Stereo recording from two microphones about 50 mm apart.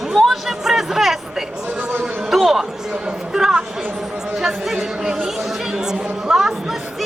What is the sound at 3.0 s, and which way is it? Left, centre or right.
Speech, centre.